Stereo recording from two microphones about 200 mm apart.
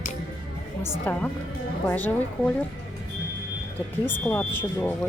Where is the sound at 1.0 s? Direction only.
10° left (ahead or behind).